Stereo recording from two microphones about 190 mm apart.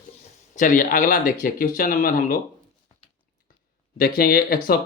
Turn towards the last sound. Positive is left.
turn(degrees=55)  # may be behind; listen again after turning